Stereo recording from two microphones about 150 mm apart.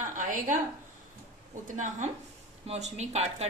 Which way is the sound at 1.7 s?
55° right (ahead or behind).